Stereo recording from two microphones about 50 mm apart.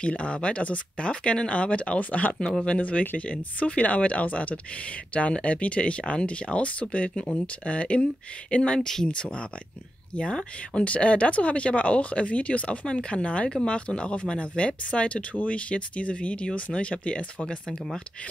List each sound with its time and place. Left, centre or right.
0.0 s speech: left
17.6 s speech: centre